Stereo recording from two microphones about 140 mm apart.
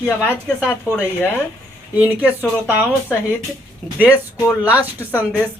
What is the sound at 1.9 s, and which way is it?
Speech, 10° right (ahead or behind).